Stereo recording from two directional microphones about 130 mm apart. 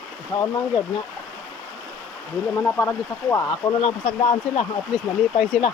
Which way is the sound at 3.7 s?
50° left (ahead or behind).